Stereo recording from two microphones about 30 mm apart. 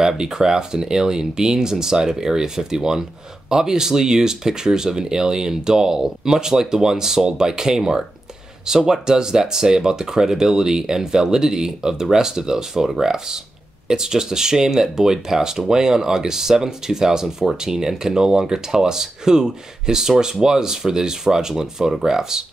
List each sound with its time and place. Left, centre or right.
0.2 s speech: right